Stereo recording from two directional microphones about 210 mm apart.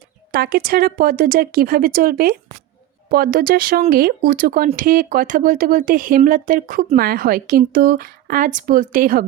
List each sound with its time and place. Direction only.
0.3 s speech: 45° right (ahead or behind)